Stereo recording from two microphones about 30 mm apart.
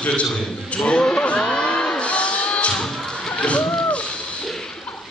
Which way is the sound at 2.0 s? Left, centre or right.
Left.